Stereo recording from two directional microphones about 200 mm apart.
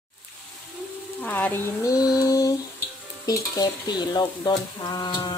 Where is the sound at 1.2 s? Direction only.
10° left (ahead or behind).